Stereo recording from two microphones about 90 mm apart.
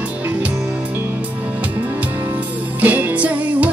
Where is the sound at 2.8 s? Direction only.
15° right (ahead or behind).